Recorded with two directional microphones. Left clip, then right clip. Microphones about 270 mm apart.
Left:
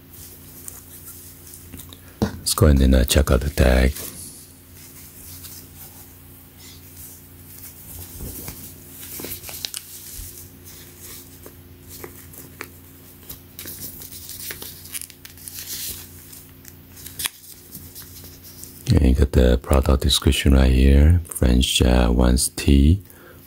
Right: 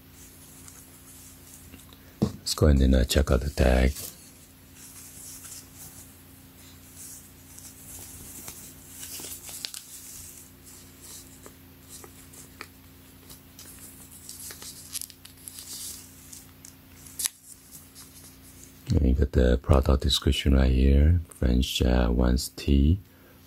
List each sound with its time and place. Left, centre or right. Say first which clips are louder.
2.4 s speech: left 5 dB; centre
14.5 s tearing: left 3 dB; centre
17.2 s scissors: left 6 dB; centre
18.9 s speech: left 7 dB; centre